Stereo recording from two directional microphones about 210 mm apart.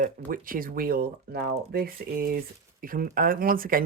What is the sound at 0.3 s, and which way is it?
Speech, 45° right (ahead or behind).